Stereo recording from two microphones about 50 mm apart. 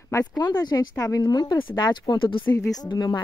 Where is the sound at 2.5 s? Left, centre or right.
Left.